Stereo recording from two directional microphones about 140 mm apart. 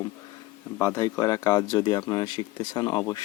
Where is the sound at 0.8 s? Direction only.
20° left (ahead or behind).